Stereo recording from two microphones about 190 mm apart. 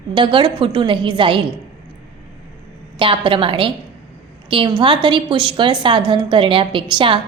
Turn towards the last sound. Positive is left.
turn(degrees=-25)  # may be behind; listen again after turning